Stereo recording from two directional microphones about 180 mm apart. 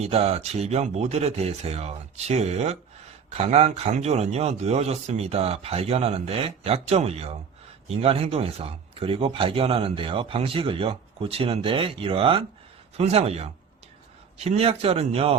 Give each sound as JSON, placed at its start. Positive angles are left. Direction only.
{"t": 0.0, "sound": "speech", "side_deg": -35}